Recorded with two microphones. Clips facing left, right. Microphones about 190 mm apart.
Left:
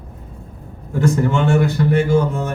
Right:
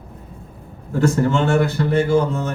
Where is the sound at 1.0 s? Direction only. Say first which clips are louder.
Even; 15° left (ahead or behind).